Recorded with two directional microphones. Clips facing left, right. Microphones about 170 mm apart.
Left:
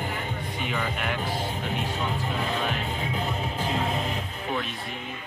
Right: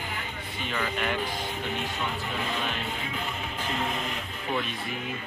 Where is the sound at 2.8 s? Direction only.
40° left (ahead or behind).